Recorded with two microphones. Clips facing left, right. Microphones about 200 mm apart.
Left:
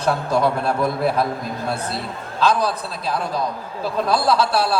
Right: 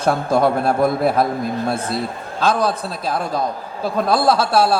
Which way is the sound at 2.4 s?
50° right (ahead or behind).